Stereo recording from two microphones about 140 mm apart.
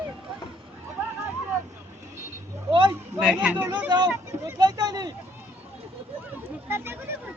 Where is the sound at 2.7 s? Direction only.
35° right (ahead or behind).